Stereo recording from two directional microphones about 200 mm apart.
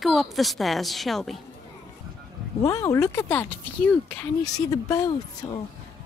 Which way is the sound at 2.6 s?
15° left (ahead or behind).